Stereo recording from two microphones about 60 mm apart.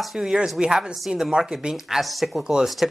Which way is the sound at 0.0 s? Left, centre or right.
Centre.